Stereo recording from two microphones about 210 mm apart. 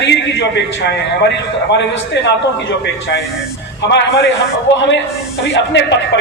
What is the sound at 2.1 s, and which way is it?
Speech, 55° left (ahead or behind).